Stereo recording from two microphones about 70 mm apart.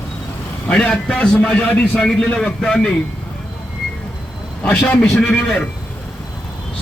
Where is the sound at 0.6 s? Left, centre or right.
Centre.